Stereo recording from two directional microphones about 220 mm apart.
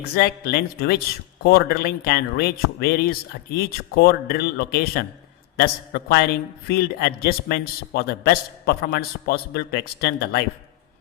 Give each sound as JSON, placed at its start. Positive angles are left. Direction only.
{"t": 0.2, "sound": "speech", "side_deg": 45}